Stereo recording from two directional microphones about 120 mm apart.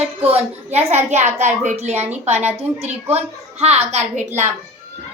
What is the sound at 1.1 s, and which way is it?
A woman's voice, 70° right (ahead or behind).